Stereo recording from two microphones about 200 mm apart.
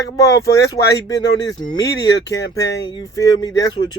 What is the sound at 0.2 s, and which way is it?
Speech, 15° left (ahead or behind).